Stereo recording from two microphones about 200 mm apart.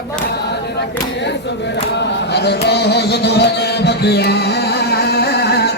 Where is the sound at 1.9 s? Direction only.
60° left (ahead or behind).